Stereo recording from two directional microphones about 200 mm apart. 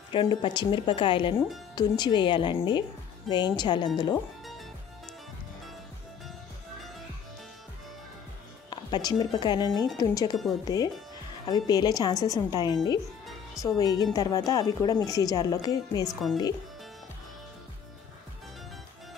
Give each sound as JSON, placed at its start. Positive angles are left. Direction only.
{"t": 0.1, "sound": "speech", "side_deg": 25}
{"t": 8.6, "sound": "speech", "side_deg": 20}
{"t": 11.4, "sound": "speech", "side_deg": 20}
{"t": 16.1, "sound": "speech", "side_deg": 0}